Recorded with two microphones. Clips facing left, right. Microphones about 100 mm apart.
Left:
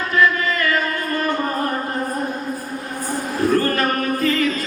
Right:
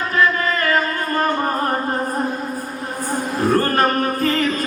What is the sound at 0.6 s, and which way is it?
Music, 40° right (ahead or behind).